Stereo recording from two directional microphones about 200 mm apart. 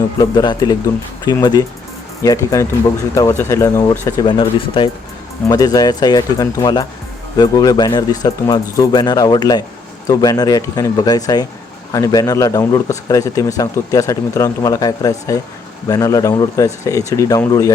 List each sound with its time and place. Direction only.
0.2 s speech: 20° left (ahead or behind)